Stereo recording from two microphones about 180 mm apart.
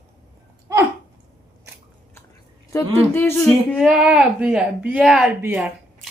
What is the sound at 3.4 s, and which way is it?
Speech, centre (ahead or behind).